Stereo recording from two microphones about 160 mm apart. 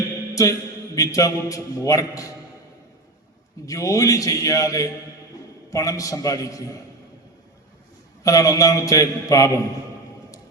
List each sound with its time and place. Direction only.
0.4 s a man's voice: 20° left (ahead or behind)
3.7 s a man's voice: 20° left (ahead or behind)
8.2 s a man's voice: 20° left (ahead or behind)